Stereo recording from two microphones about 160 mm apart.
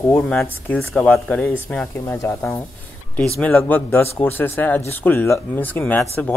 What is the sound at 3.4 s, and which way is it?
Speech, 5° left (ahead or behind).